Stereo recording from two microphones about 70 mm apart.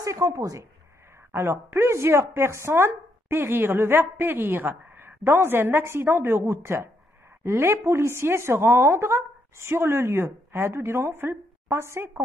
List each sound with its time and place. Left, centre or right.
0.0 s speech: right
1.3 s speech: right